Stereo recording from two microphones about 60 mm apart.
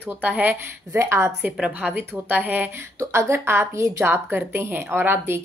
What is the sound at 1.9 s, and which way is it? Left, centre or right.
Speech, right.